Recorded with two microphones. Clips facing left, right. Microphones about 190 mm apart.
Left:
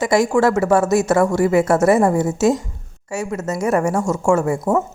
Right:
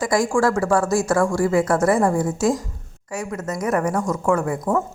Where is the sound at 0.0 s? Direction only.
25° left (ahead or behind).